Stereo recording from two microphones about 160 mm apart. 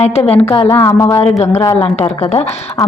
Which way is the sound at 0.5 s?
20° left (ahead or behind).